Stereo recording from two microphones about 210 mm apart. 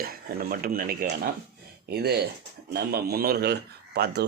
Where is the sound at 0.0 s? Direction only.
45° right (ahead or behind).